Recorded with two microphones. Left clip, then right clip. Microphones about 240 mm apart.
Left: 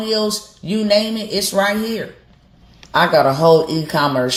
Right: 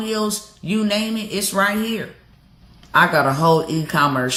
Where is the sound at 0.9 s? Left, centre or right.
Right.